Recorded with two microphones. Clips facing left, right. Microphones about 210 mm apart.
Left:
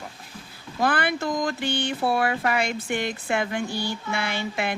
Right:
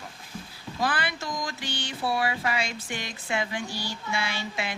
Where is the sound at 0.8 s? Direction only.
55° left (ahead or behind).